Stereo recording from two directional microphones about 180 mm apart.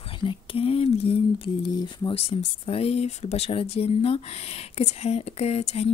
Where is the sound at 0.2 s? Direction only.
30° left (ahead or behind).